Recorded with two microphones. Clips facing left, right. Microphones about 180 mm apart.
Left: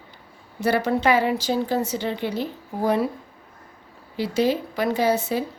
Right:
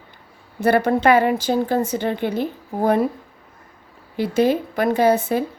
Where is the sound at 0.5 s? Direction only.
55° right (ahead or behind).